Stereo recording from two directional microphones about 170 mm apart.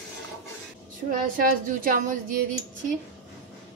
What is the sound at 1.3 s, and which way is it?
A woman's voice, 55° right (ahead or behind).